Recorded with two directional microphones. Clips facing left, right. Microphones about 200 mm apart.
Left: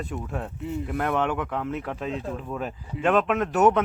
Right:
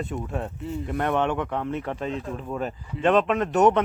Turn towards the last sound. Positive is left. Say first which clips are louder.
# right 1 dB
turn(degrees=5)  # may be behind; listen again after turning